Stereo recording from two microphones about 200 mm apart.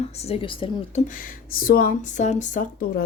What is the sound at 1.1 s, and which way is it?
Speech, 45° left (ahead or behind).